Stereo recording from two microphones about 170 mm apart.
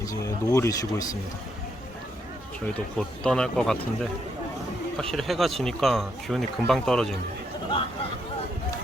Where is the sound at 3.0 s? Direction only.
5° left (ahead or behind).